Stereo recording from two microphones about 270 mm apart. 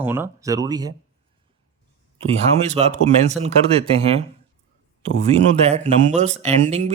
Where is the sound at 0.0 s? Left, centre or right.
Centre.